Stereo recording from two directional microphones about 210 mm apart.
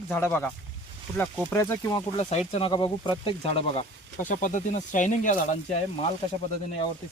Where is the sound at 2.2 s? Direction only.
30° left (ahead or behind).